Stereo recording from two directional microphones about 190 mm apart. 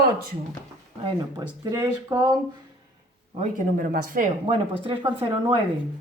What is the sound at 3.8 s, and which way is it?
Speech, 45° right (ahead or behind).